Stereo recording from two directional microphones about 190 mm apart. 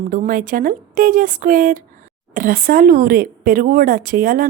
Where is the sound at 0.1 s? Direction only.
45° right (ahead or behind).